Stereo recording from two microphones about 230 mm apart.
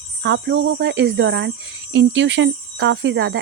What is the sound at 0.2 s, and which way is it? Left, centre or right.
Speech, right.